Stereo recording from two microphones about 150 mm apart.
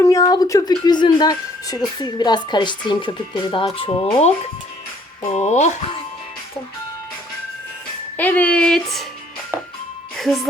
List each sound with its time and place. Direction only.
0.0 s a woman's voice: 25° left (ahead or behind); by 4.3 s 40° left (ahead or behind)
5.3 s speech: 50° left (ahead or behind)
8.1 s speech: 10° left (ahead or behind)
10.2 s speech: centre (ahead or behind)